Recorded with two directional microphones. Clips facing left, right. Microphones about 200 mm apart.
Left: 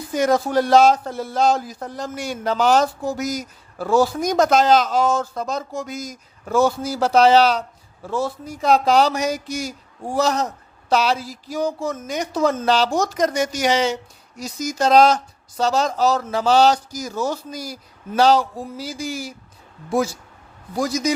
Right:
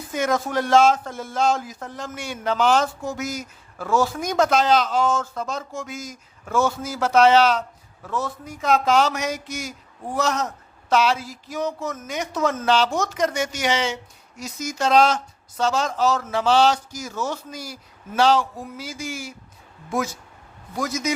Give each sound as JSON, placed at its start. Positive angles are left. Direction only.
{"t": 0.1, "sound": "speech", "side_deg": 35}